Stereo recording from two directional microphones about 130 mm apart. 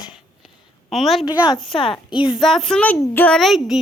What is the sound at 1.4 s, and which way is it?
Speech, 35° left (ahead or behind).